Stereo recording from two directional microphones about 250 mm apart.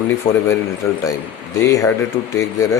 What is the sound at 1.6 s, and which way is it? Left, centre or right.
Speech, centre.